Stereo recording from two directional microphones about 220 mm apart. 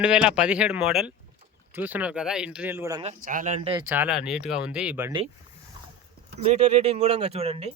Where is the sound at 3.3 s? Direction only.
35° right (ahead or behind).